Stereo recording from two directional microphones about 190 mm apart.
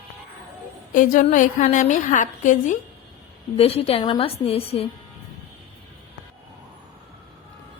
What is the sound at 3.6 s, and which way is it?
A woman's voice, 30° left (ahead or behind).